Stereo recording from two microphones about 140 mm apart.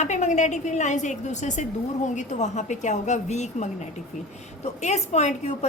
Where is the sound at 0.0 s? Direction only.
55° left (ahead or behind).